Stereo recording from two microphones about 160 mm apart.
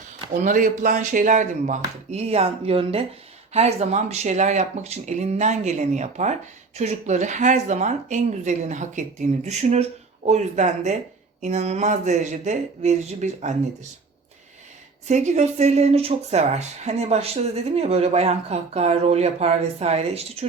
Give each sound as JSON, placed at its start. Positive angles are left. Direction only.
{"t": 0.4, "sound": "speech", "side_deg": -55}
{"t": 15.0, "sound": "speech", "side_deg": -45}